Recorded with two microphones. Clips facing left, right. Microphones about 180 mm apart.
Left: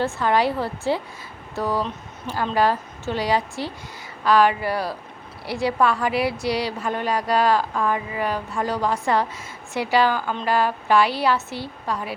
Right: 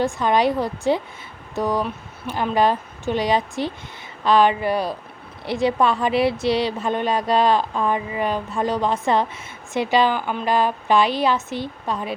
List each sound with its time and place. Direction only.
0.0 s a woman's voice: 20° right (ahead or behind)